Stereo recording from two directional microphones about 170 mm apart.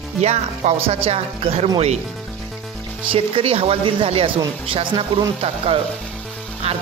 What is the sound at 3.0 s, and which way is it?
Speech, 30° right (ahead or behind).